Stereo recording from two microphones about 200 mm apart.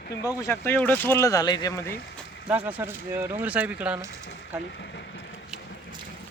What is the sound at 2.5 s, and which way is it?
Speech, 10° right (ahead or behind).